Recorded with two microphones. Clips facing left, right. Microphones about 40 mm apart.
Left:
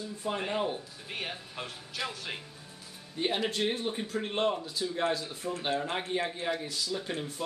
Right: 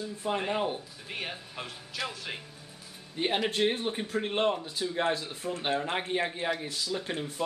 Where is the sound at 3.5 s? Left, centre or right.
Right.